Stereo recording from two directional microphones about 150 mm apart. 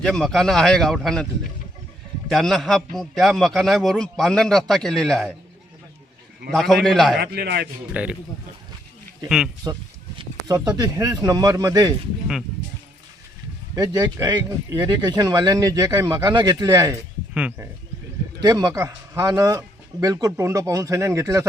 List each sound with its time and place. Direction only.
0.0 s a man's voice: 5° left (ahead or behind)
6.5 s a man's voice: centre (ahead or behind)
7.2 s a man's voice: 90° right
8.0 s speech: 10° right (ahead or behind)
9.6 s speech: 25° right (ahead or behind)
13.7 s speech: 25° right (ahead or behind)
17.3 s speech: 10° right (ahead or behind)
18.4 s speech: 20° right (ahead or behind)